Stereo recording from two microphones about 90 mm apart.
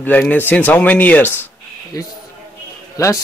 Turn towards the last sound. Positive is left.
turn(degrees=35)  # may be behind; listen again after turning